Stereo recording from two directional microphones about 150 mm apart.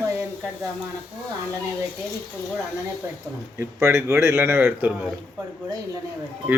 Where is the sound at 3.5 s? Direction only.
15° right (ahead or behind).